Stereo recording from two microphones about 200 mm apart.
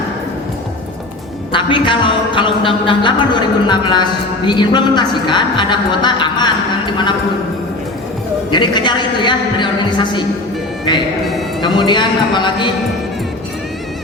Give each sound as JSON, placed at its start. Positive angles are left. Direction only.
{"t": 1.5, "sound": "speech", "side_deg": 25}
{"t": 8.4, "sound": "speech", "side_deg": 25}
{"t": 11.6, "sound": "speech", "side_deg": 20}